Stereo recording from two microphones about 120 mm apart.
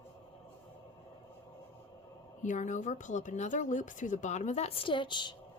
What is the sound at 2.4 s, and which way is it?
Speech, 90° left.